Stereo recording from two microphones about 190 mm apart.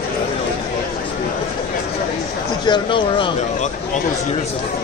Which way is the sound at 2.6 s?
25° left (ahead or behind).